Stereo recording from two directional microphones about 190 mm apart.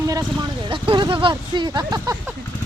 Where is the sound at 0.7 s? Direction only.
25° right (ahead or behind).